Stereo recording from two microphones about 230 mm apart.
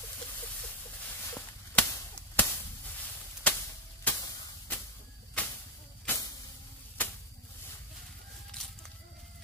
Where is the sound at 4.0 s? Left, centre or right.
Centre.